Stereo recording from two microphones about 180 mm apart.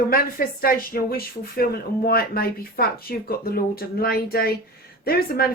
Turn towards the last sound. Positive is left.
turn(degrees=60)  # may be behind; listen again after turning